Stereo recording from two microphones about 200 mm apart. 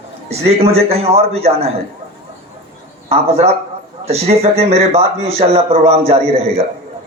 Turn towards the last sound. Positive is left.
turn(degrees=-30)  # may be behind; listen again after turning